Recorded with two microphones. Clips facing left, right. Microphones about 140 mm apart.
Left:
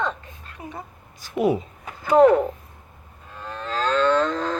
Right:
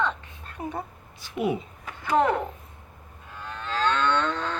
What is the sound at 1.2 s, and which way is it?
Speech, 40° left (ahead or behind).